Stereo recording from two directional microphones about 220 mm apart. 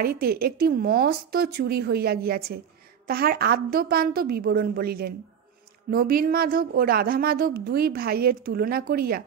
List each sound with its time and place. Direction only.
0.0 s speech: 45° right (ahead or behind)